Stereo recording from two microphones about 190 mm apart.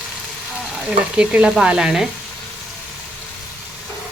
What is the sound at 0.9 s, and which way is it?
Speech, 5° right (ahead or behind).